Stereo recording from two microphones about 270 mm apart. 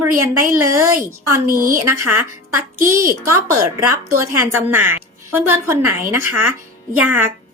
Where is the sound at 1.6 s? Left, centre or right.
Right.